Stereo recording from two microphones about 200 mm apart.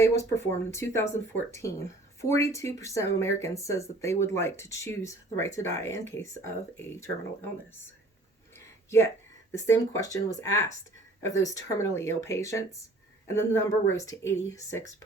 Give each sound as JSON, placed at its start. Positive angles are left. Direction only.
{"t": 0.0, "sound": "speech", "side_deg": 15}
{"t": 8.5, "sound": "a sound", "side_deg": 15}
{"t": 9.6, "sound": "speech", "side_deg": 15}